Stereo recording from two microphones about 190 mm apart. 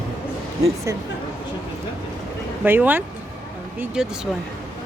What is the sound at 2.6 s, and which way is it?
Speech, 10° right (ahead or behind).